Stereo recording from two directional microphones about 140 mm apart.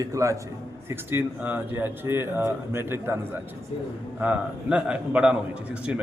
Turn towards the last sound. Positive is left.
turn(degrees=-10)  # may be behind; listen again after turning